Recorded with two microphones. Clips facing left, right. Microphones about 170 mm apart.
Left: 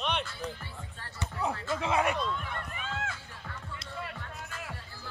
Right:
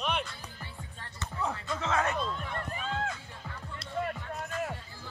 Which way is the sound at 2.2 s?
35° right (ahead or behind).